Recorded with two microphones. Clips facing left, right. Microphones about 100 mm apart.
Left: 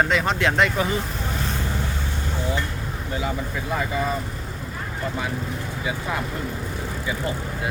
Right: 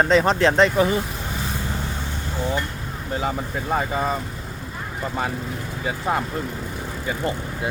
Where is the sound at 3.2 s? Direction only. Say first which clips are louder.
Right 2 dB; 40° right (ahead or behind).